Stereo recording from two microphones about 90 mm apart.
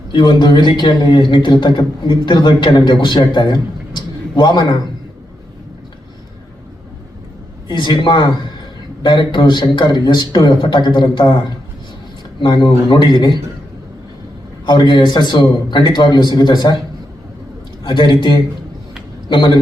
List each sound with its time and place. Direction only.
0.1 s a man's voice: 60° left (ahead or behind)
7.7 s a man's voice: 60° left (ahead or behind)
14.7 s a man's voice: 55° left (ahead or behind)
17.8 s a man's voice: 60° left (ahead or behind)